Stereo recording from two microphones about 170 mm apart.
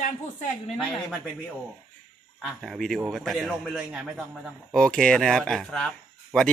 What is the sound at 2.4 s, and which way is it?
Speech, centre (ahead or behind).